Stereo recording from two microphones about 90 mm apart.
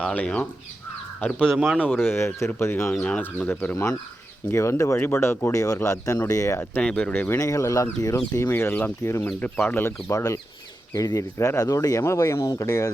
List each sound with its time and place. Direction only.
0.0 s speech: 15° left (ahead or behind)
2.9 s speech: 10° left (ahead or behind)
4.5 s speech: 35° left (ahead or behind)
6.6 s speech: 15° left (ahead or behind)
7.3 s speech: 35° left (ahead or behind)
8.4 s speech: 25° left (ahead or behind)